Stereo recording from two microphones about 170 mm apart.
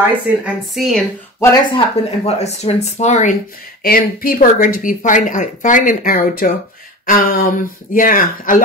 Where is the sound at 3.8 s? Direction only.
60° left (ahead or behind).